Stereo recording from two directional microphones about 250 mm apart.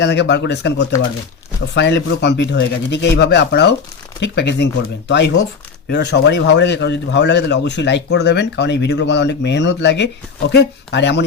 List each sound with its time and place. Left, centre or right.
0.0 s a man's voice: left